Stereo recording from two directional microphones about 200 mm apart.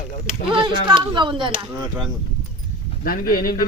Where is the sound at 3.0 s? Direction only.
45° left (ahead or behind).